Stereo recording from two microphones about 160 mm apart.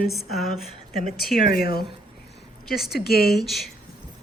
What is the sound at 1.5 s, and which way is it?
Speech, 70° left (ahead or behind).